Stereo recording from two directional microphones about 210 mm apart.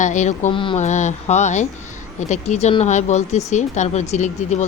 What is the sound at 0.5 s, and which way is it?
Speech, 25° left (ahead or behind).